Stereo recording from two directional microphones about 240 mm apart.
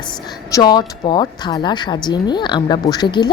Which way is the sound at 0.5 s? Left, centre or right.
Centre.